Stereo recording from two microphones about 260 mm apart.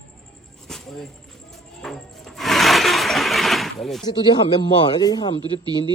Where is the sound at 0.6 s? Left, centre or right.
Centre.